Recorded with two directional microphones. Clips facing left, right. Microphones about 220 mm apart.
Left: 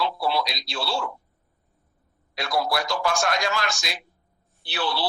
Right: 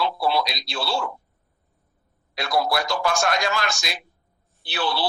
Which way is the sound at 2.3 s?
60° right (ahead or behind).